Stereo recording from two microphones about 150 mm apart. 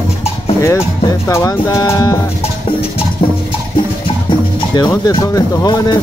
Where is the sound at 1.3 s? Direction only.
20° left (ahead or behind).